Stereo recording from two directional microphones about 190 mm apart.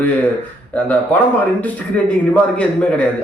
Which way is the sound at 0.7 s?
5° left (ahead or behind).